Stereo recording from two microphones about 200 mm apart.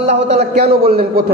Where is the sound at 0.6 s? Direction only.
50° right (ahead or behind).